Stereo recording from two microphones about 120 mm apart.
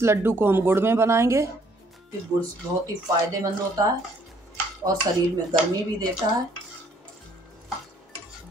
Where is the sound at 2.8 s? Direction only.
30° right (ahead or behind).